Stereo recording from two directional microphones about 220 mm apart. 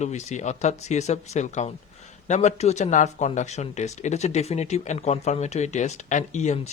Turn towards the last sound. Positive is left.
turn(degrees=30)  # may be behind; listen again after turning